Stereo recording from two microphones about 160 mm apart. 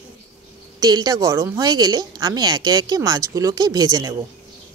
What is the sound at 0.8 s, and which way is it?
Speech, 25° right (ahead or behind).